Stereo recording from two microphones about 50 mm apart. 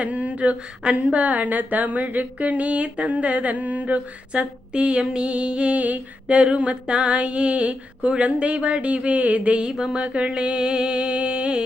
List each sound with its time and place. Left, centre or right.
0.0 s a woman's voice: right